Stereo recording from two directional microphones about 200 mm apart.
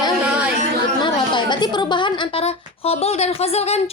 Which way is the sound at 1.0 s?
25° left (ahead or behind).